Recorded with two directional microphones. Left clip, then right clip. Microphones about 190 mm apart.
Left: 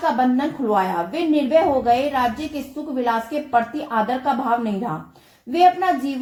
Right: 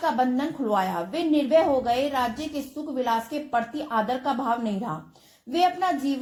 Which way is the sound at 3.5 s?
35° right (ahead or behind).